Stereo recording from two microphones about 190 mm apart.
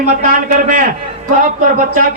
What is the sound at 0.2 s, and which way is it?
Speech, 45° right (ahead or behind).